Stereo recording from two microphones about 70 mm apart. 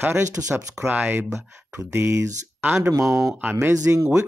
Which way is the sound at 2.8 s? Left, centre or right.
Right.